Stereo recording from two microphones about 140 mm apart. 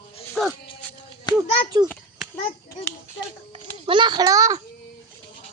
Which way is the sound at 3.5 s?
35° right (ahead or behind).